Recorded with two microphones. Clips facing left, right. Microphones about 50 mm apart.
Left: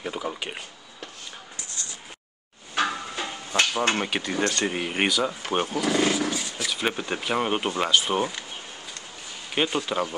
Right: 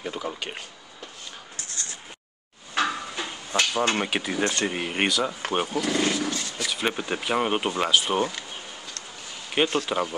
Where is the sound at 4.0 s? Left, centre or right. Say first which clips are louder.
Even; centre.